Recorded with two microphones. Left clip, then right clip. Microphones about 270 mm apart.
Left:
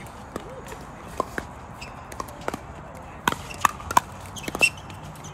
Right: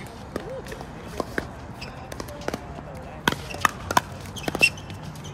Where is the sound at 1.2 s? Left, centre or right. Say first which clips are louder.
Left 3 dB; left.